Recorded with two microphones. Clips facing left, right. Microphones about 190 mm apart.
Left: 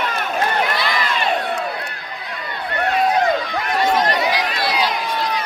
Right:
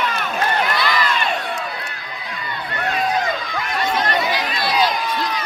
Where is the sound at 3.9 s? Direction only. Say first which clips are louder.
Left 2 dB; 40° left (ahead or behind).